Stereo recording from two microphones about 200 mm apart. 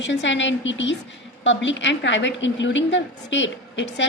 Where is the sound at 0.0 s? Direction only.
65° left (ahead or behind).